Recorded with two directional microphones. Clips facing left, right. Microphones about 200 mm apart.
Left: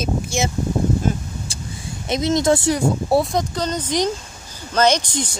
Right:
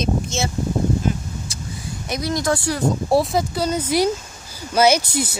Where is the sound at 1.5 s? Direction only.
30° left (ahead or behind).